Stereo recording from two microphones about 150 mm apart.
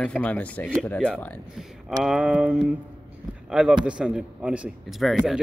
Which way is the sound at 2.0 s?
5° right (ahead or behind).